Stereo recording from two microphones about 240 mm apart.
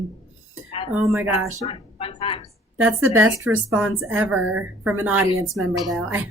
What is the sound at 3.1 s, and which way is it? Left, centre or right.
A woman's voice, centre.